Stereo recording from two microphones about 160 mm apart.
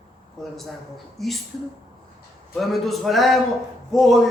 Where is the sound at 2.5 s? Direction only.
Centre (ahead or behind).